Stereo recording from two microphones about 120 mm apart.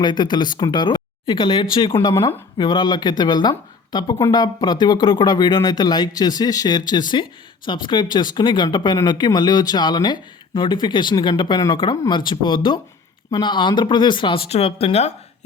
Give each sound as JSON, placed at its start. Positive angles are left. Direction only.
{"t": 0.0, "sound": "speech", "side_deg": 40}
{"t": 2.1, "sound": "speech", "side_deg": 20}
{"t": 2.6, "sound": "speech", "side_deg": 40}